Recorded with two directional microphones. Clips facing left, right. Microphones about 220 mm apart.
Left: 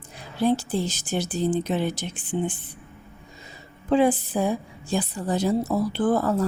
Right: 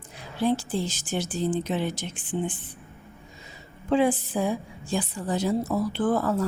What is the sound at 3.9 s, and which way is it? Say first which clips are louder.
A woman's voice: left 2 dB; 35° left (ahead or behind).